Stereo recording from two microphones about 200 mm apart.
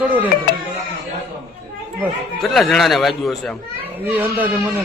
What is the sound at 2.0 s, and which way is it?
A man's voice, centre (ahead or behind).